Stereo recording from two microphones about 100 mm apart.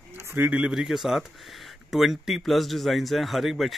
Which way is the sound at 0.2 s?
25° right (ahead or behind).